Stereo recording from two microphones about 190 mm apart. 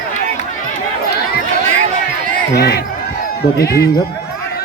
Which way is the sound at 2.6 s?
55° left (ahead or behind).